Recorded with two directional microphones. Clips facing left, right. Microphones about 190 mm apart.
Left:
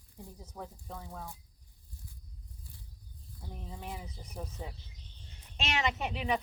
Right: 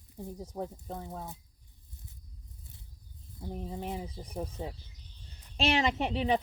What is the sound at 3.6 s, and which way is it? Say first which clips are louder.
Speech: right 5 dB; 25° right (ahead or behind).